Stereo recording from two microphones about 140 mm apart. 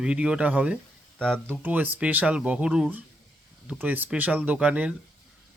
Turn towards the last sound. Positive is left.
turn(degrees=-10)  # may be behind; listen again after turning